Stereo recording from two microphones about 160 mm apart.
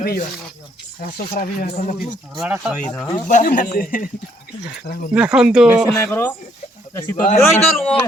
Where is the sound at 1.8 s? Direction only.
60° left (ahead or behind).